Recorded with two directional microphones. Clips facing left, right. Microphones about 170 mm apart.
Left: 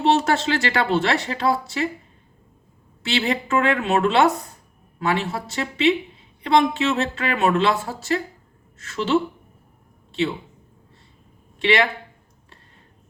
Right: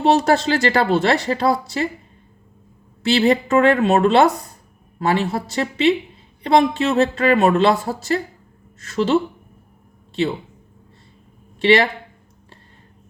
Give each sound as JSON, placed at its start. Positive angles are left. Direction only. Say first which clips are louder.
{"t": 0.0, "sound": "speech", "louder": "right 3 dB", "side_deg": -40}
{"t": 3.0, "sound": "speech", "louder": "right 7 dB", "side_deg": -35}
{"t": 11.6, "sound": "speech", "louder": "right 5 dB", "side_deg": -35}